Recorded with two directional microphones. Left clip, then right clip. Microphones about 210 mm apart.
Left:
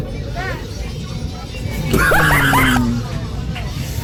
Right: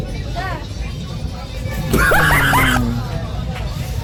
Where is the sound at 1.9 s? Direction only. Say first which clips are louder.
Even; centre (ahead or behind).